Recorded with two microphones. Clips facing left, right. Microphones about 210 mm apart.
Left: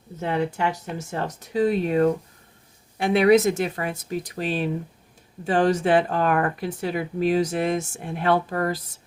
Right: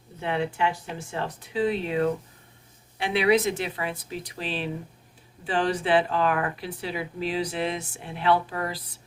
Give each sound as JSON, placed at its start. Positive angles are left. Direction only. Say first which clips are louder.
{"t": 0.2, "sound": "speech", "louder": "left 2 dB", "side_deg": 40}